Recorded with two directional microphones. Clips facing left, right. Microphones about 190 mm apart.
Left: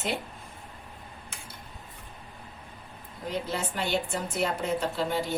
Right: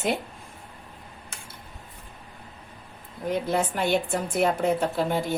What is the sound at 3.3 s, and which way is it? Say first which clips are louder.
A woman's voice: right 6 dB; 55° right (ahead or behind).